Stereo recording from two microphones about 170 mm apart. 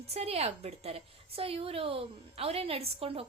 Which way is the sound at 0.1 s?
35° right (ahead or behind).